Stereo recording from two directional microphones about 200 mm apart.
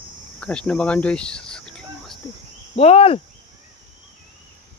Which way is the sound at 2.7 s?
30° left (ahead or behind).